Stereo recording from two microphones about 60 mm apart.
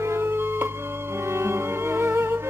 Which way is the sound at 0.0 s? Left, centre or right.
Right.